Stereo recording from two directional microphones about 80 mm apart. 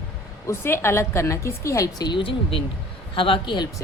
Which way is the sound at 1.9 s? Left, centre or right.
Left.